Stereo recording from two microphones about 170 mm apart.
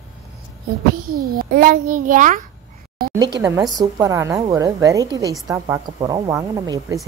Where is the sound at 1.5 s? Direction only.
55° right (ahead or behind).